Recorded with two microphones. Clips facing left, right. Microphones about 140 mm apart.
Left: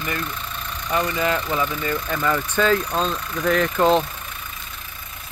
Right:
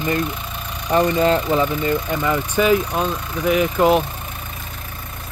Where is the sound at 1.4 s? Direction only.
20° right (ahead or behind).